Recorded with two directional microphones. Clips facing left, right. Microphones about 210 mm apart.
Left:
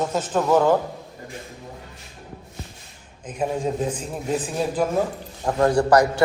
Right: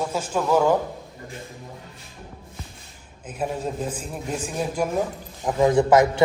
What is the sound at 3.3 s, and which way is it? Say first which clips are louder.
A man's voice: left 3 dB; 5° right (ahead or behind).